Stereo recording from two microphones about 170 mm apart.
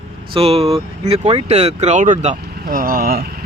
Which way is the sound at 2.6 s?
55° right (ahead or behind).